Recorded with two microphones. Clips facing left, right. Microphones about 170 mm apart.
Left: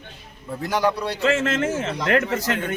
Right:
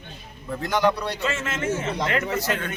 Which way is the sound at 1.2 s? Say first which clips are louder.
Left 7 dB; 90° left.